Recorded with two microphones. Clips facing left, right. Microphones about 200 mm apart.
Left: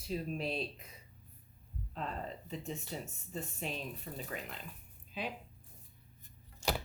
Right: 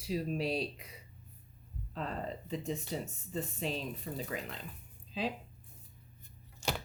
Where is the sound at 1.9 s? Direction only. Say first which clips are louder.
Right 3 dB; 40° right (ahead or behind).